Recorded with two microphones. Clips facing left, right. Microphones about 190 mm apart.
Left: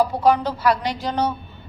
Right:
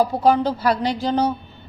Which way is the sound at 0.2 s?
30° right (ahead or behind).